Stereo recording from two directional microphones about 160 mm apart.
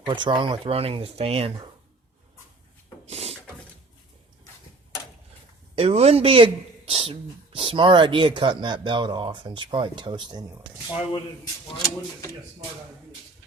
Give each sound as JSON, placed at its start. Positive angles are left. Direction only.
{"t": 0.0, "sound": "speech", "side_deg": -30}
{"t": 3.1, "sound": "wood", "side_deg": -40}
{"t": 5.7, "sound": "speech", "side_deg": -40}